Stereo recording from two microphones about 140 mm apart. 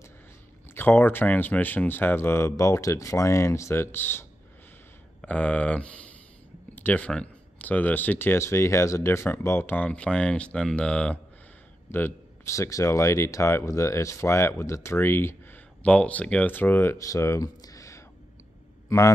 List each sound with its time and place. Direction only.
0.7 s speech: 15° left (ahead or behind)
11.9 s a man's voice: 20° left (ahead or behind)